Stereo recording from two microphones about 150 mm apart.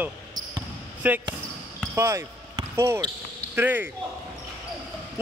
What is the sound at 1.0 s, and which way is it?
Speech, 10° right (ahead or behind).